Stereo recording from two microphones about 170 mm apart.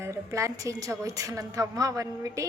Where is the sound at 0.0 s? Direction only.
15° right (ahead or behind).